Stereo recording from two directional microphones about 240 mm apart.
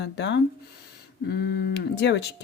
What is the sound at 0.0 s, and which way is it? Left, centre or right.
Speech, left.